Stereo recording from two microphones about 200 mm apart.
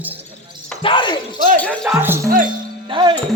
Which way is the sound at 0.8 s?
25° left (ahead or behind).